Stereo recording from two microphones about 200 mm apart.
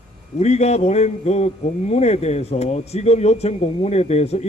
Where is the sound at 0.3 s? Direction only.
30° left (ahead or behind).